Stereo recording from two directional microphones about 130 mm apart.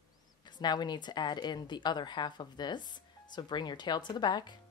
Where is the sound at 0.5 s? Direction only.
35° left (ahead or behind).